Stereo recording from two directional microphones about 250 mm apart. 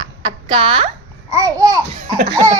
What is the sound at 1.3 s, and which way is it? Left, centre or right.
Babbling, centre.